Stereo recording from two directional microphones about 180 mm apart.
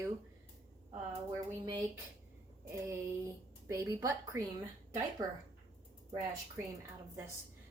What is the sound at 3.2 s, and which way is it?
A woman's voice, 15° right (ahead or behind).